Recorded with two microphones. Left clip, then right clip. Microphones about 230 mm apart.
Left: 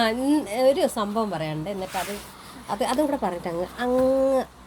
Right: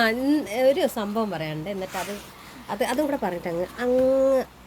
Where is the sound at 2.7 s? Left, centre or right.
Centre.